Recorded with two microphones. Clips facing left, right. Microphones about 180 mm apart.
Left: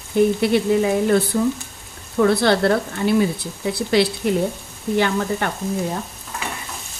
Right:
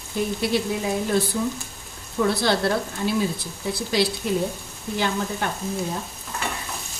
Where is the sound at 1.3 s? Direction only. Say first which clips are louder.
Left 6 dB; 50° left (ahead or behind).